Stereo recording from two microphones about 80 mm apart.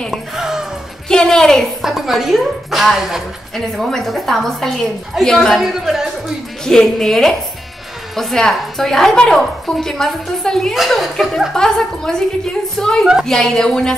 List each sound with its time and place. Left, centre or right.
0.4 s music: centre
1.0 s a woman's voice: centre
1.8 s a woman's voice: centre
5.6 s a woman's voice: centre
6.6 s a woman's voice: centre